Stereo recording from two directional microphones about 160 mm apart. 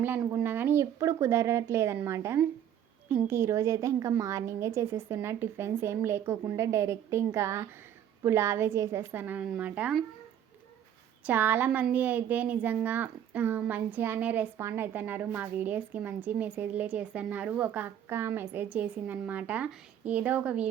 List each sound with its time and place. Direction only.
0.0 s speech: 15° right (ahead or behind)
11.3 s speech: 10° right (ahead or behind)